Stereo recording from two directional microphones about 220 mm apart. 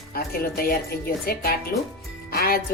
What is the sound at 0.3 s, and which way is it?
A woman's voice, 40° left (ahead or behind).